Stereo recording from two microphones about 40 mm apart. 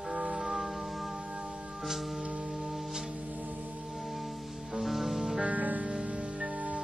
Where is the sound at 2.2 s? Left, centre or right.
Right.